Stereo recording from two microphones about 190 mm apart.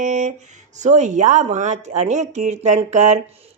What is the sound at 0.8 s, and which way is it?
Speech, 40° right (ahead or behind).